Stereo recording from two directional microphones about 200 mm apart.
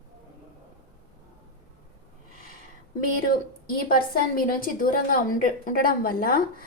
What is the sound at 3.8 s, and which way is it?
A woman's voice, 45° left (ahead or behind).